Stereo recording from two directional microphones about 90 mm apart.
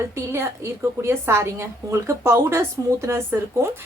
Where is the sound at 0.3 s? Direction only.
30° right (ahead or behind).